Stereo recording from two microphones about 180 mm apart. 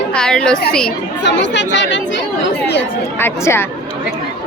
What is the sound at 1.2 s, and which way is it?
Speech, 80° left.